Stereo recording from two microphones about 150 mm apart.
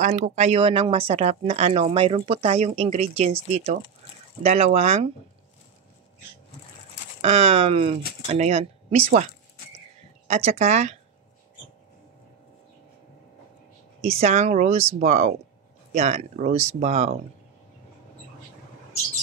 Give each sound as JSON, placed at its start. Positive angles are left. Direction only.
{"t": 0.0, "sound": "speech", "side_deg": -50}
{"t": 7.2, "sound": "speech", "side_deg": -45}
{"t": 14.0, "sound": "speech", "side_deg": -45}